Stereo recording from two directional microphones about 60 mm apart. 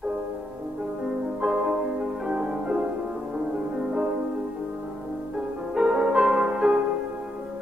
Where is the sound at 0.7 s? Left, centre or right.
Centre.